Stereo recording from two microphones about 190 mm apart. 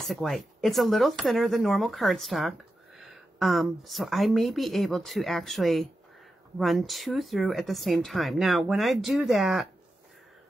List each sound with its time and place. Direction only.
0.1 s speech: centre (ahead or behind)